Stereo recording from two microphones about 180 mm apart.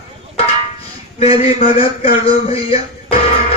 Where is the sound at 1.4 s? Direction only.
30° left (ahead or behind).